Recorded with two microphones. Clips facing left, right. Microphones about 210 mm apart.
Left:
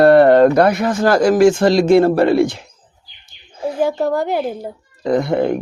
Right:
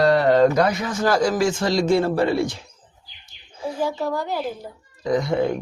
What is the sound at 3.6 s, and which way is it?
A woman's voice, 60° left (ahead or behind).